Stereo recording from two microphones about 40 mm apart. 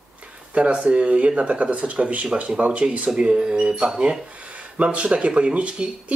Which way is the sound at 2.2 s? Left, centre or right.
Right.